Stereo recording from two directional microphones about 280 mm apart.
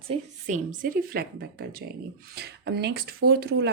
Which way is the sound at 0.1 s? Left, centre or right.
Right.